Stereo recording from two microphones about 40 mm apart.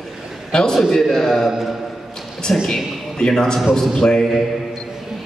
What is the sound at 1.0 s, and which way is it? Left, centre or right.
Speech, centre.